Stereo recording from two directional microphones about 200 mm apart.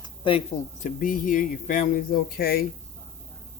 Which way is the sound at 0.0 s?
25° left (ahead or behind).